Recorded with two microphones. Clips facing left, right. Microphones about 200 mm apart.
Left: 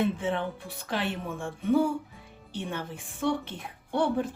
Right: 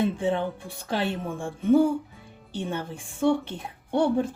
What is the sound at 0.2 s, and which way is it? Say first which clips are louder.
Speech: right 4 dB; 30° right (ahead or behind).